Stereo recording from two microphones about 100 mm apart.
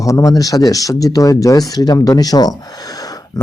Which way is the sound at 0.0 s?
35° left (ahead or behind).